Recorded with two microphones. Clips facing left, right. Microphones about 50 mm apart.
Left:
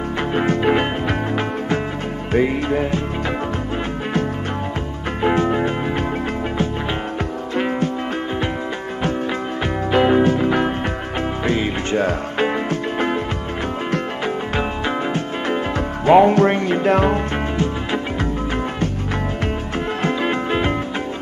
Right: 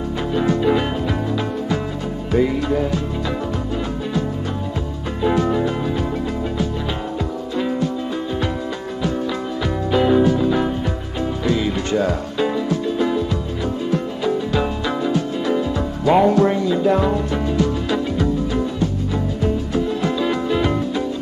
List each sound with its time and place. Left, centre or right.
0.3 s music: left
5.2 s music: left
7.5 s music: left
9.9 s music: left
14.6 s music: left